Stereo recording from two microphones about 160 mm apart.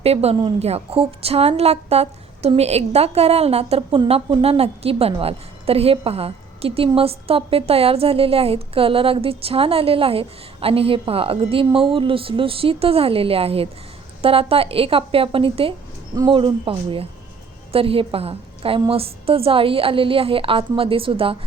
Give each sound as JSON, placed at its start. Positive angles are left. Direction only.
{"t": 0.0, "sound": "a woman's voice", "side_deg": -40}